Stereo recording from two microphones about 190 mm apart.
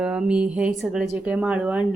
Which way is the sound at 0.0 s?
5° right (ahead or behind).